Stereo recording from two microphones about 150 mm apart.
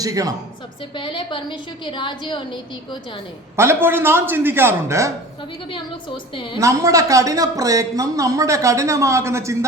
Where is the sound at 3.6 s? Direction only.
15° right (ahead or behind).